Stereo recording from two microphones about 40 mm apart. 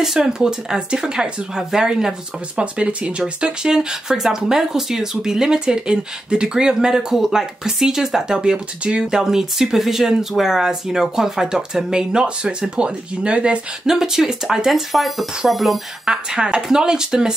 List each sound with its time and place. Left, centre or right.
0.2 s speech: centre
2.6 s speech: right
13.8 s speech: centre
14.7 s speech: centre
16.1 s speech: centre